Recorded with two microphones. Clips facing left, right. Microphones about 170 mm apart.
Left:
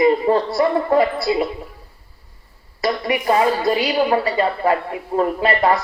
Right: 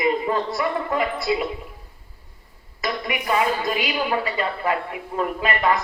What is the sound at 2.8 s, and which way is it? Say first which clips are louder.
A woman's voice: left 7 dB; 35° left (ahead or behind).